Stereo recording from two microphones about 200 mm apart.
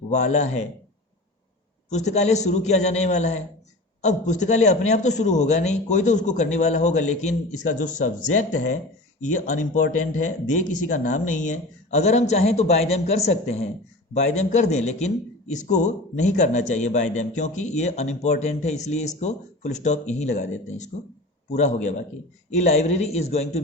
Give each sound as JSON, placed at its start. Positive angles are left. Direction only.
{"t": 0.1, "sound": "a man's voice", "side_deg": 35}
{"t": 1.9, "sound": "a man's voice", "side_deg": 35}
{"t": 9.2, "sound": "a man's voice", "side_deg": 40}